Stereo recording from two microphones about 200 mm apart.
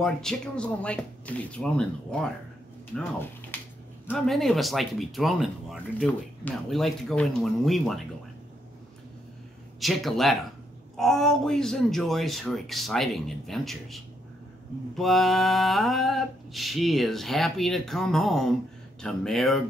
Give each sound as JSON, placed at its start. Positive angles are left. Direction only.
{"t": 0.0, "sound": "speech", "side_deg": 5}
{"t": 9.8, "sound": "speech", "side_deg": 0}